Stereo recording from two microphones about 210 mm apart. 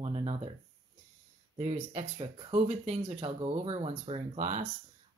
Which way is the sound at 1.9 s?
30° right (ahead or behind).